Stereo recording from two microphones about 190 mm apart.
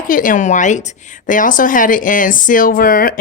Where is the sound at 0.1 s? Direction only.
45° left (ahead or behind).